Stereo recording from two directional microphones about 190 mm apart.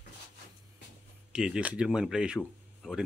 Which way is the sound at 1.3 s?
5° right (ahead or behind).